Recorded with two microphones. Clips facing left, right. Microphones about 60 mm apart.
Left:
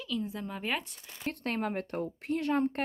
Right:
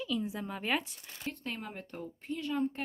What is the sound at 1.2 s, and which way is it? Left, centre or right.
Speech, left.